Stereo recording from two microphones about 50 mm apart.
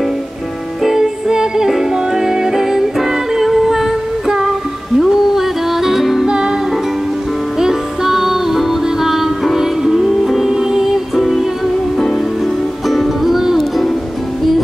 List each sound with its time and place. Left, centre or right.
0.8 s music: centre
6.2 s music: centre
7.5 s music: centre
12.8 s music: centre